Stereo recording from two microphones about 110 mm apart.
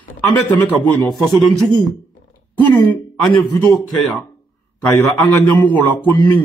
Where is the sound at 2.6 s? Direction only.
15° left (ahead or behind).